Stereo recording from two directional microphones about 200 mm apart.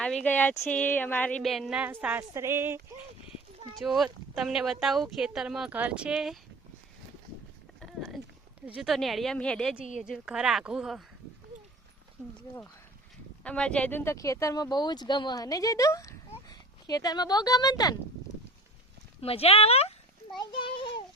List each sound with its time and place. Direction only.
0.0 s speech: 5° left (ahead or behind); by 3.0 s 10° right (ahead or behind)
3.8 s speech: centre (ahead or behind)
7.8 s a sound: centre (ahead or behind)
8.6 s speech: 5° right (ahead or behind)
13.4 s speech: 5° left (ahead or behind)
19.2 s speech: 30° left (ahead or behind)